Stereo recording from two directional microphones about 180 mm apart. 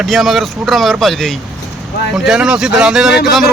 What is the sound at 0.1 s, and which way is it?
Speech, centre (ahead or behind).